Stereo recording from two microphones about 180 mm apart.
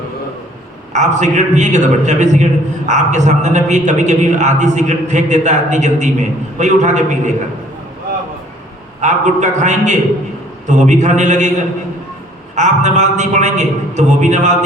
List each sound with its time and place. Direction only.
0.9 s a man's voice: 40° right (ahead or behind)
9.0 s a man's voice: 40° right (ahead or behind)
12.5 s a man's voice: 40° right (ahead or behind)